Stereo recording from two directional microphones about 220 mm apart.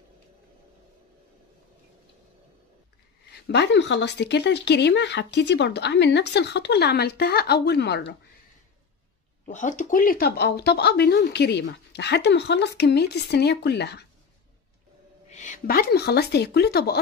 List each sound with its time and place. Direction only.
3.4 s speech: 50° left (ahead or behind)
9.5 s speech: 35° left (ahead or behind); by 14.0 s 50° left (ahead or behind)
15.2 s speech: 35° left (ahead or behind)